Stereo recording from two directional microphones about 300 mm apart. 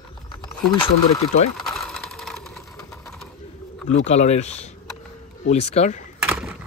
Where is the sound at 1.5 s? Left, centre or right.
Centre.